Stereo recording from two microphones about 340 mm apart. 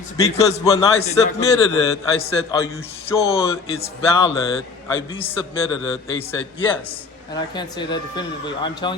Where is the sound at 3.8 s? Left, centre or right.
Centre.